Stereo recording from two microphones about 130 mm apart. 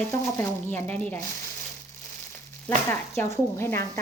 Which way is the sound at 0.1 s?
15° left (ahead or behind).